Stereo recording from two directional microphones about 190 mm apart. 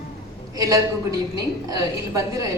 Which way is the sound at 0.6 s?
20° right (ahead or behind).